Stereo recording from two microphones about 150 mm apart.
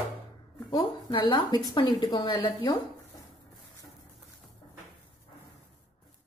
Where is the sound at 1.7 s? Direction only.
30° left (ahead or behind).